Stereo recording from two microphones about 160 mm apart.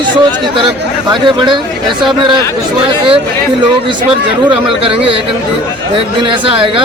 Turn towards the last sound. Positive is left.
turn(degrees=-35)  # may be behind; listen again after turning